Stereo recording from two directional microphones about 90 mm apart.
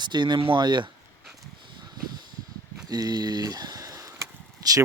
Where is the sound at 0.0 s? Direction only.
55° right (ahead or behind).